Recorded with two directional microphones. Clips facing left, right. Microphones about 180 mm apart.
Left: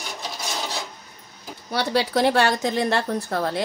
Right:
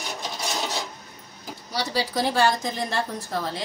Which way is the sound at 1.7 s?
60° left (ahead or behind).